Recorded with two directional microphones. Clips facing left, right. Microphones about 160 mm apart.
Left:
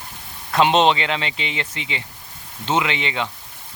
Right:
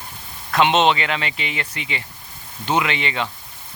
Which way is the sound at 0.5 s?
35° left (ahead or behind).